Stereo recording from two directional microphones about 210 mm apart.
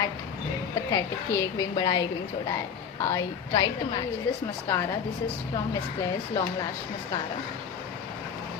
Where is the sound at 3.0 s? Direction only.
20° left (ahead or behind).